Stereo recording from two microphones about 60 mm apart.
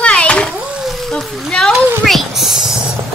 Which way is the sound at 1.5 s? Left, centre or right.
Centre.